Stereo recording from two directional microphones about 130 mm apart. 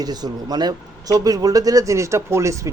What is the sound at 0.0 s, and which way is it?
A man's voice, 30° right (ahead or behind).